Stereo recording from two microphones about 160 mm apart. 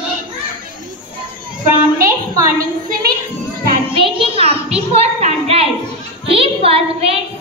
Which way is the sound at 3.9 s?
35° right (ahead or behind).